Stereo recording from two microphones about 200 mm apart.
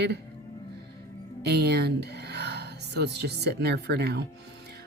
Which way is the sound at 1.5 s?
55° right (ahead or behind).